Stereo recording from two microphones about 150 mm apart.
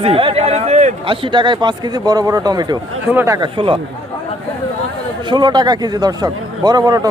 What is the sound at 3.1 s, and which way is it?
Speech, 10° right (ahead or behind).